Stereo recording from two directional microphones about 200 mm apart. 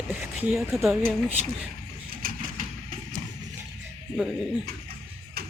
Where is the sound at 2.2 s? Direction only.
45° right (ahead or behind).